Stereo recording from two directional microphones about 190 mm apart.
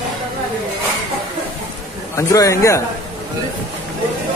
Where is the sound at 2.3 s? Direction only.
15° left (ahead or behind).